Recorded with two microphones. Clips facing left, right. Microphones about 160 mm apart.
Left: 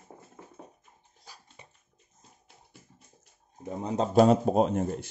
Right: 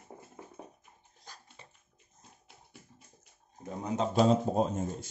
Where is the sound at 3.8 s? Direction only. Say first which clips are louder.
Left 3 dB; 35° left (ahead or behind).